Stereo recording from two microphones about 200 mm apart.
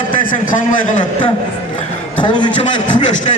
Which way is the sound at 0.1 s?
40° left (ahead or behind).